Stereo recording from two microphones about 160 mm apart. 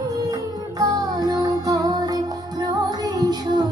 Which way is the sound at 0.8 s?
20° right (ahead or behind).